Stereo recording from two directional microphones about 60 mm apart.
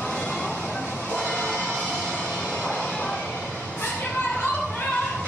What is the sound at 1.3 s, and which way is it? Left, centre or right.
Music, centre.